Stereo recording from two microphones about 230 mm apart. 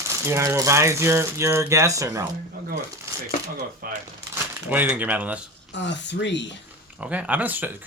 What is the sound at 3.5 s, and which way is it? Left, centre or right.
Speech, right.